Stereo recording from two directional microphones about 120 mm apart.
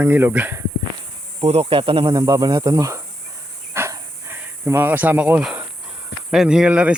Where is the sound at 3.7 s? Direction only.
20° right (ahead or behind).